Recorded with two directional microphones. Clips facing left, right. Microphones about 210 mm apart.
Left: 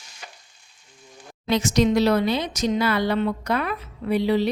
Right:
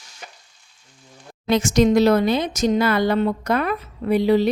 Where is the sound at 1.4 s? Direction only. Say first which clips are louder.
Right 3 dB; 50° right (ahead or behind).